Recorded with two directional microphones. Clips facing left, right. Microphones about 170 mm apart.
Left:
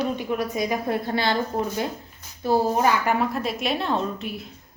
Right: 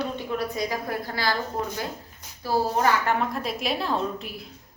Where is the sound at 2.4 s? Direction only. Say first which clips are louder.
Left 3 dB; 15° left (ahead or behind).